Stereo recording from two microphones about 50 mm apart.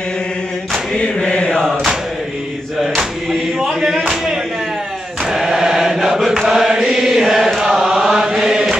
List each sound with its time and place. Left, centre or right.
0.9 s chant: left
3.0 s a sound: centre
5.3 s chant: centre